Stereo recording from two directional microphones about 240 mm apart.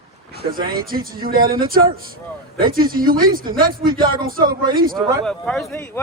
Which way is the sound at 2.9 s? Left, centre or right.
Right.